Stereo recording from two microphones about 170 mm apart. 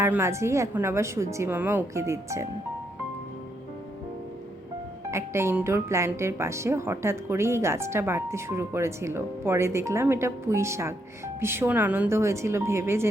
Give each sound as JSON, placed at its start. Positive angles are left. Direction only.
{"t": 0.0, "sound": "speech", "side_deg": -15}
{"t": 5.1, "sound": "speech", "side_deg": -15}